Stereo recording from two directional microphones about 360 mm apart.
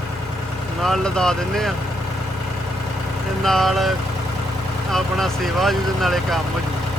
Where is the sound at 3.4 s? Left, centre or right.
Centre.